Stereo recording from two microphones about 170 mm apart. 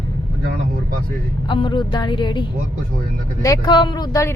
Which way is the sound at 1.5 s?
25° left (ahead or behind).